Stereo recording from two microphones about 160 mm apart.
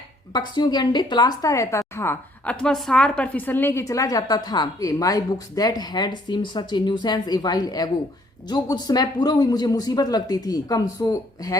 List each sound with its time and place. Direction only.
0.3 s a woman's voice: 25° left (ahead or behind)
2.6 s a woman's voice: 5° left (ahead or behind); by 11.5 s 20° left (ahead or behind)